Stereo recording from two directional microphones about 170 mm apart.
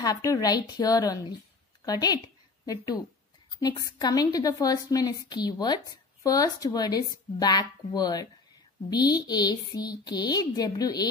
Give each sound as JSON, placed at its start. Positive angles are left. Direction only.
{"t": 0.0, "sound": "a woman's voice", "side_deg": 20}